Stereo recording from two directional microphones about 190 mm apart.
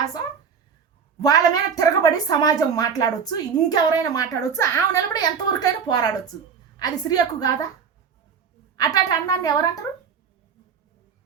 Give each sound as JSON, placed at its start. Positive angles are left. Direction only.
{"t": 0.0, "sound": "a woman's voice", "side_deg": 20}
{"t": 8.7, "sound": "a woman's voice", "side_deg": 20}